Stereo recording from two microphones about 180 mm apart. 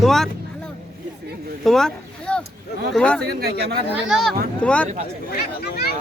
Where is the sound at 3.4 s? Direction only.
60° right (ahead or behind).